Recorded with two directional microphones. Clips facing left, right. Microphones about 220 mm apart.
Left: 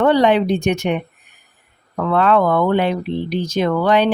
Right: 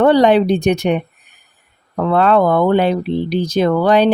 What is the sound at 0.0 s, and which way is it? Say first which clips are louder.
Speech: right 3 dB; 35° right (ahead or behind).